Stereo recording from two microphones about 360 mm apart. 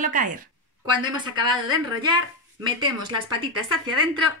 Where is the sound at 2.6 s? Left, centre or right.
Centre.